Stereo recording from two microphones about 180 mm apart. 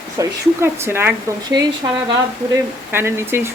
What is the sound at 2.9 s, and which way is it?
Speech, 15° right (ahead or behind).